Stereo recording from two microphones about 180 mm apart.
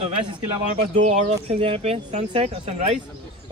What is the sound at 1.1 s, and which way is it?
Speech, 35° right (ahead or behind).